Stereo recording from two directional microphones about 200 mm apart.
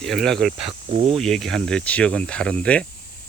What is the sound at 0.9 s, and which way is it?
Speech, 30° right (ahead or behind).